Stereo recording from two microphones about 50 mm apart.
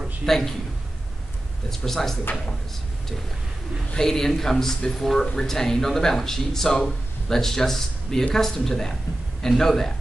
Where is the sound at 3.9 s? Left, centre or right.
Centre.